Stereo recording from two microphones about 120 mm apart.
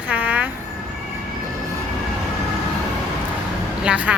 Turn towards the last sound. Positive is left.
turn(degrees=-10)  # may be behind; listen again after turning